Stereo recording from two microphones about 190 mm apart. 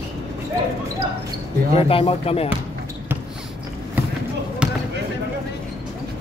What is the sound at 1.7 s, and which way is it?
Speech, 30° left (ahead or behind).